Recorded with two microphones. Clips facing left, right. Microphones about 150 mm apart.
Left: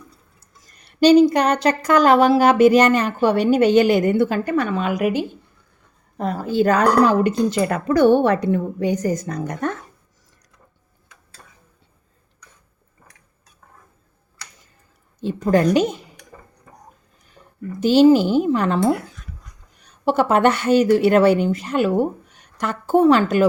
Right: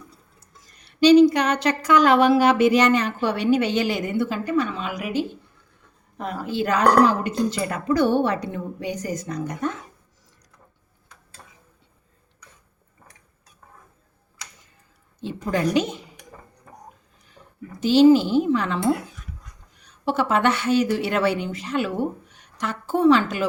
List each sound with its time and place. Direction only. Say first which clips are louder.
0.9 s speech: left 1 dB; 45° left (ahead or behind)
6.1 s speech: left 6 dB; 40° left (ahead or behind)
7.3 s a woman's voice: left 5 dB; 55° left (ahead or behind)
15.2 s a sound: left 7 dB; 50° left (ahead or behind)
15.7 s speech: left 4 dB; 45° left (ahead or behind)
17.7 s speech: left 2 dB; 50° left (ahead or behind)
20.1 s speech: left 5 dB; 45° left (ahead or behind)